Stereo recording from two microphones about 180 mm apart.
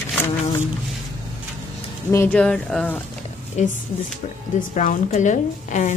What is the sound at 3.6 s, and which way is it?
A woman's voice, 40° left (ahead or behind).